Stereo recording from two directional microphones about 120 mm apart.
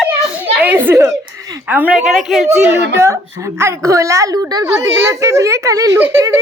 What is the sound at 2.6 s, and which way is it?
A child's voice, 20° right (ahead or behind).